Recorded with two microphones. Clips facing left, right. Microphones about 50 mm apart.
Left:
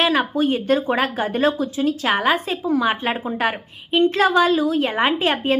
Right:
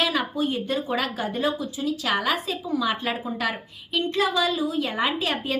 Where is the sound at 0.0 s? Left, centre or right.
Left.